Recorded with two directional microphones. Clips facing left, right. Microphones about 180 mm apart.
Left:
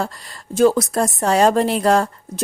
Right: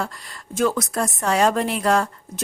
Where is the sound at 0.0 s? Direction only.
35° left (ahead or behind).